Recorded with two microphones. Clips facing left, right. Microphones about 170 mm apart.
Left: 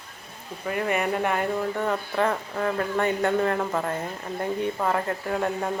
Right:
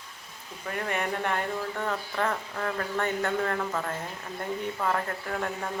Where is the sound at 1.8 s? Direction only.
20° left (ahead or behind).